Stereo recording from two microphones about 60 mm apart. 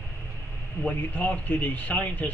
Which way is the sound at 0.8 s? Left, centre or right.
Left.